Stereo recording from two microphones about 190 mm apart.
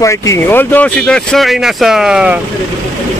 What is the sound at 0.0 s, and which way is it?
Speech, 15° left (ahead or behind).